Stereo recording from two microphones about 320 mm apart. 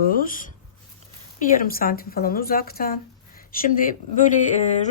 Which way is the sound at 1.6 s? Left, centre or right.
Left.